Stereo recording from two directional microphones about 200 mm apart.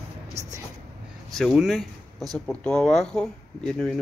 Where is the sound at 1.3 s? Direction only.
Centre (ahead or behind).